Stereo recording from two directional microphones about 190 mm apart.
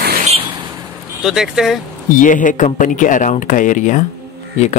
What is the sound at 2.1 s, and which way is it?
Speech, 45° left (ahead or behind).